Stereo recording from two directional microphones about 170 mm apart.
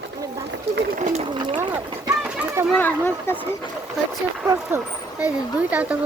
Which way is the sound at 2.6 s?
10° left (ahead or behind).